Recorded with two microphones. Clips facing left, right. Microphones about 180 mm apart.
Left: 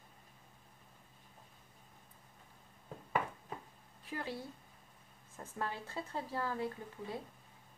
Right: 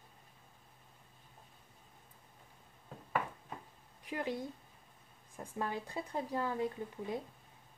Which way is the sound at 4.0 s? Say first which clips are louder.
Right 4 dB; 20° right (ahead or behind).